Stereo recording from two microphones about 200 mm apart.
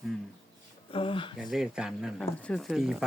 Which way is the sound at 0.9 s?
25° left (ahead or behind).